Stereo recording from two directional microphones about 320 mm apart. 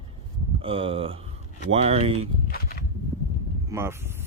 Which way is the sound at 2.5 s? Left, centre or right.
Left.